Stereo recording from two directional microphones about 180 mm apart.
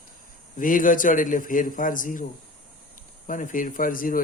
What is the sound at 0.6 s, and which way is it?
Speech, 50° left (ahead or behind).